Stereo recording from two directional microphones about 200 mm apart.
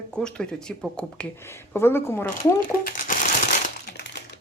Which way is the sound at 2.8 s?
45° left (ahead or behind).